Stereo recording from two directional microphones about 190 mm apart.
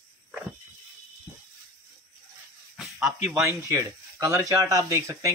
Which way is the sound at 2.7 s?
Centre (ahead or behind).